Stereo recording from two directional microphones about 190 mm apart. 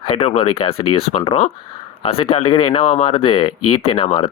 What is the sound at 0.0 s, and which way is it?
Speech, 30° left (ahead or behind).